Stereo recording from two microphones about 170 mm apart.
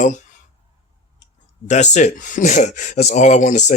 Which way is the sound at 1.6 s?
45° left (ahead or behind).